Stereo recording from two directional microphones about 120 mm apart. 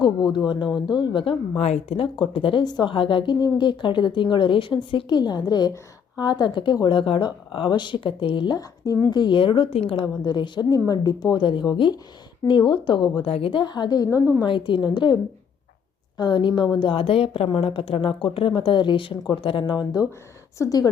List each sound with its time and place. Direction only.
0.3 s a woman's voice: 40° left (ahead or behind); by 2.0 s 60° left (ahead or behind)
2.1 s a woman's voice: 45° left (ahead or behind); by 14.3 s 30° left (ahead or behind)
14.4 s a woman's voice: 45° left (ahead or behind)